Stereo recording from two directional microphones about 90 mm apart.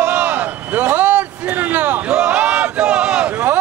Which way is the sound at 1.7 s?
20° right (ahead or behind).